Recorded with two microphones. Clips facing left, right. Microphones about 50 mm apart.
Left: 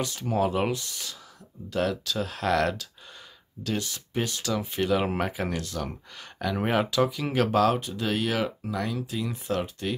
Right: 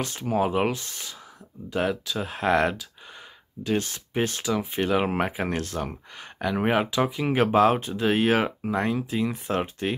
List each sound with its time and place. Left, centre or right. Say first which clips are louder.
0.2 s speech: right 2 dB; centre
0.7 s speech: even; right
1.7 s speech: right 1 dB; centre
3.7 s speech: right 5 dB; right
4.4 s speech: right 2 dB; centre
5.5 s speech: right 3 dB; right
6.1 s speech: right 3 dB; centre